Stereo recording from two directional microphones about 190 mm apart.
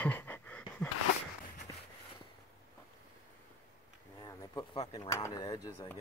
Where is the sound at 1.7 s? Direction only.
20° left (ahead or behind).